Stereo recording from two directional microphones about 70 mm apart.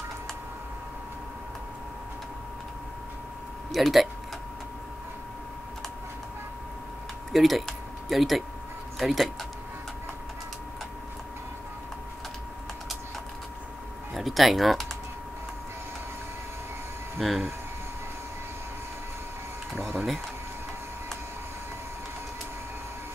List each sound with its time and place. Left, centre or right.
3.7 s speech: centre
7.3 s speech: centre
14.1 s speech: centre
17.2 s speech: centre
19.8 s a sound: right